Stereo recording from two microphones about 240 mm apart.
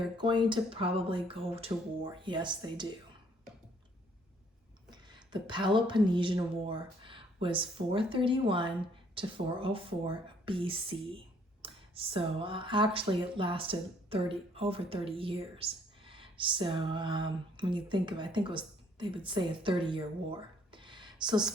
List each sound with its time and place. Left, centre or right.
0.2 s speech: centre
4.9 s speech: centre